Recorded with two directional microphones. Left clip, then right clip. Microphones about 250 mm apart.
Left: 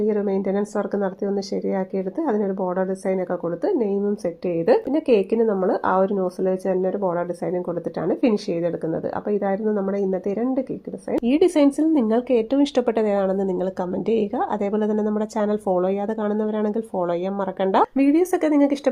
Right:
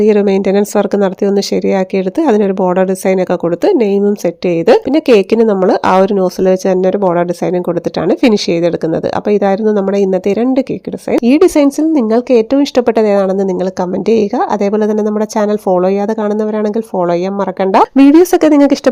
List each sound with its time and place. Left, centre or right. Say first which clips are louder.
0.0 s speech: right 12 dB; right
11.3 s speech: right 8 dB; right
17.6 s speech: right 11 dB; right